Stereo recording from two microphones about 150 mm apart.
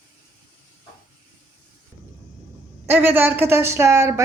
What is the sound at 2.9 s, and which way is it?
Speech, 15° right (ahead or behind).